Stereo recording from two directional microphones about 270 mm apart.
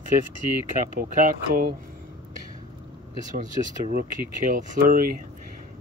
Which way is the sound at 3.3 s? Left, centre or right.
Right.